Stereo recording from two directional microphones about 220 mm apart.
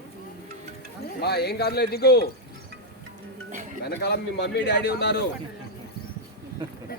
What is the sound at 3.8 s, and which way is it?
A man's voice, 50° left (ahead or behind).